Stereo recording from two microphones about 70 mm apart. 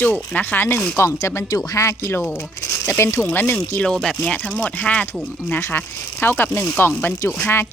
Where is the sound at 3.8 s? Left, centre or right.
Centre; by 7.3 s left.